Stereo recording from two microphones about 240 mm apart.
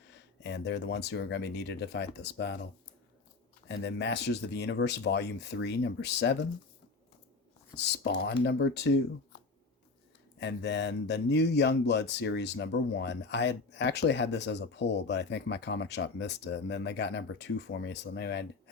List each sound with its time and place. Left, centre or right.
0.1 s speech: left
3.7 s speech: left
7.8 s speech: left
10.4 s speech: left